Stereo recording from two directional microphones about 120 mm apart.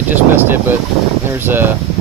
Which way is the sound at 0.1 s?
15° right (ahead or behind).